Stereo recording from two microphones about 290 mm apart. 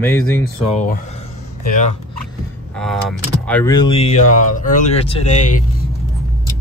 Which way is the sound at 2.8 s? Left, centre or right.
Centre.